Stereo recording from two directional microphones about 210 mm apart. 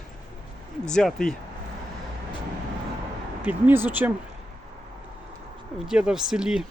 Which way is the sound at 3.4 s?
10° right (ahead or behind).